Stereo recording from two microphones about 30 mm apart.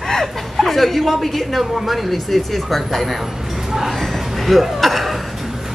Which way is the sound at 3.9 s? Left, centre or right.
Centre.